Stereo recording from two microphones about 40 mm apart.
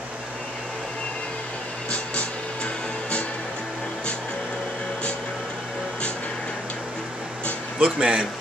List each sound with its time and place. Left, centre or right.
1.9 s music: left
7.8 s speech: right